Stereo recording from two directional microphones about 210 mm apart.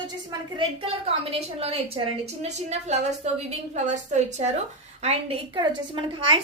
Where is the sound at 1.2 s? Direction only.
25° right (ahead or behind).